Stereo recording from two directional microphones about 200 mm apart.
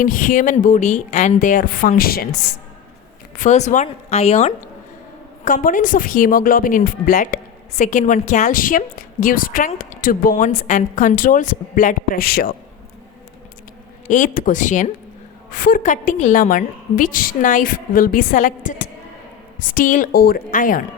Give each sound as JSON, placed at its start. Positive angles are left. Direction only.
{"t": 0.0, "sound": "a woman's voice", "side_deg": 40}
{"t": 3.3, "sound": "a woman's voice", "side_deg": 40}
{"t": 5.6, "sound": "a woman's voice", "side_deg": 40}
{"t": 14.1, "sound": "a woman's voice", "side_deg": 40}